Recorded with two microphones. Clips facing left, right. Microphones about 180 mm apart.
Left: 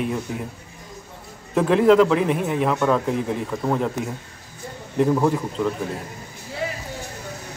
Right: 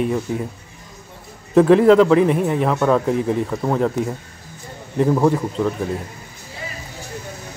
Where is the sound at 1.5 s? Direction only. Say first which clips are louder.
Right 4 dB; centre (ahead or behind).